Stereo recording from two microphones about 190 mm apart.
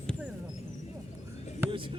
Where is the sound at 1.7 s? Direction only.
25° right (ahead or behind).